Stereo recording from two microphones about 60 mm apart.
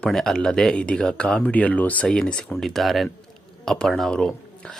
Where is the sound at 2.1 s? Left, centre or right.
Centre.